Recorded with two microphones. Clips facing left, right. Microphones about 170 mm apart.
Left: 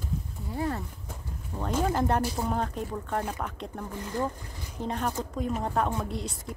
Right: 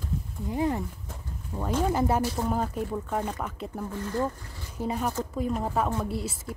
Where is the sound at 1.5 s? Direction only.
5° right (ahead or behind).